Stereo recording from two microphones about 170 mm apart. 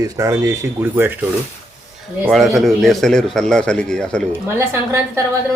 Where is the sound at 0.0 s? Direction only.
20° right (ahead or behind).